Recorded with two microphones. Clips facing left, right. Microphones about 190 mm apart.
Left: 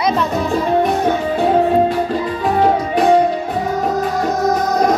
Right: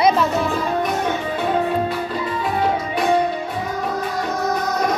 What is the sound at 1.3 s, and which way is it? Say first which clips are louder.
Music: left 7 dB; 45° left (ahead or behind).